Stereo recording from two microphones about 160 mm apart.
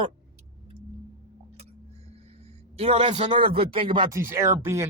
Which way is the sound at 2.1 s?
40° right (ahead or behind).